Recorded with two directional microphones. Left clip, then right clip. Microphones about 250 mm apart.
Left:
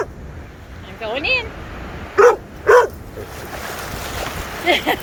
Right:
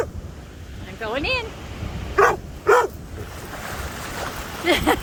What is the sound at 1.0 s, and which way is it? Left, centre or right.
Speech, centre.